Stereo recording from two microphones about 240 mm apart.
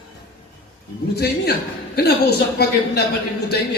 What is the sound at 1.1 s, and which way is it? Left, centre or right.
A man's voice, left.